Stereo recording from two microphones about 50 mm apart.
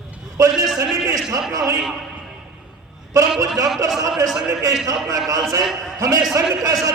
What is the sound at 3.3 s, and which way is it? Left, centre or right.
A man's voice, centre.